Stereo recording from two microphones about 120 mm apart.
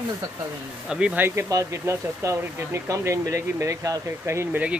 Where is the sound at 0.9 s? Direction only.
10° right (ahead or behind).